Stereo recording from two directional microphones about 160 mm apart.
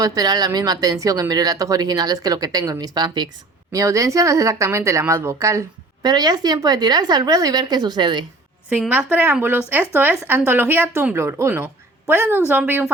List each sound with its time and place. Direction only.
0.0 s a woman's voice: 25° right (ahead or behind)
8.7 s a woman's voice: 10° right (ahead or behind)